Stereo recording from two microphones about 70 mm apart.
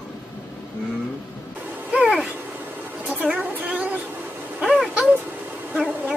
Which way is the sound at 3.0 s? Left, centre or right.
Right.